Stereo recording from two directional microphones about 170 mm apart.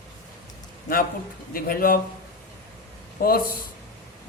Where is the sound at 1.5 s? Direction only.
55° left (ahead or behind).